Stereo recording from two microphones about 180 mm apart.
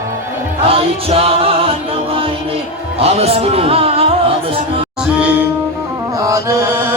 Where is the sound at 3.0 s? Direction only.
35° right (ahead or behind).